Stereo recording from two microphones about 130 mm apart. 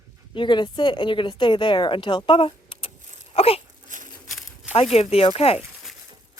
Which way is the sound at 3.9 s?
75° right (ahead or behind).